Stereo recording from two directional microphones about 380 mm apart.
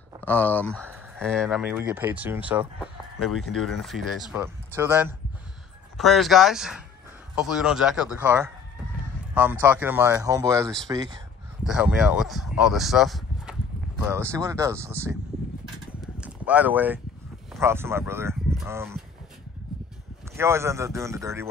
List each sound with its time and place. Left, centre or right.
0.2 s speech: centre
16.2 s speech: centre
20.3 s speech: centre